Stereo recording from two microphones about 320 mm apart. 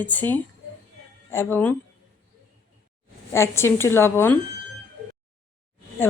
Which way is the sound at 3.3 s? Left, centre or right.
Centre.